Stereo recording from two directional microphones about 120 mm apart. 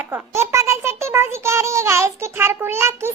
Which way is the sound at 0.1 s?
20° right (ahead or behind).